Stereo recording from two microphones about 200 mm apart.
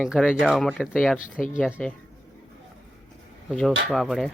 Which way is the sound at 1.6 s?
Centre (ahead or behind).